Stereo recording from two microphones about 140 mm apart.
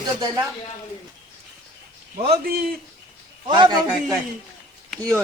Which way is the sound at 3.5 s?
30° right (ahead or behind).